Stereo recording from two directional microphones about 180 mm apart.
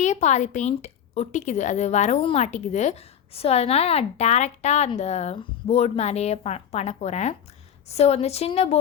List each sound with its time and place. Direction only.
0.0 s a woman's voice: 40° left (ahead or behind)